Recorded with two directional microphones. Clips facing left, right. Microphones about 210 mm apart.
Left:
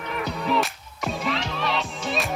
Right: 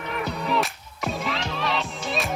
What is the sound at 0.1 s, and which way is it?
Music, centre (ahead or behind).